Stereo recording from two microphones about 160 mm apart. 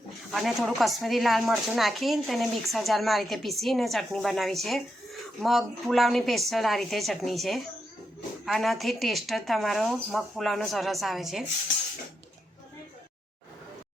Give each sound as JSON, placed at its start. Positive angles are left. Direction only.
{"t": 0.3, "sound": "a woman's voice", "side_deg": 0}